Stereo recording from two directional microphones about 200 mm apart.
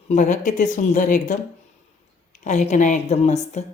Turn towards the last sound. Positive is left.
turn(degrees=35)  # may be behind; listen again after turning